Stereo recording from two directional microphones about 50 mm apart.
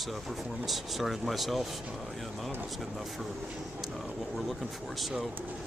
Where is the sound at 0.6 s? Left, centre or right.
Centre.